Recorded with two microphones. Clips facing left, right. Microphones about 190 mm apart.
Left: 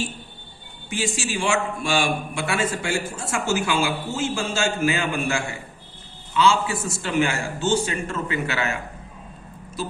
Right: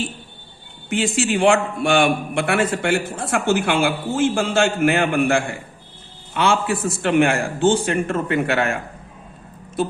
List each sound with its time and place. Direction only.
0.9 s a man's voice: 60° right (ahead or behind)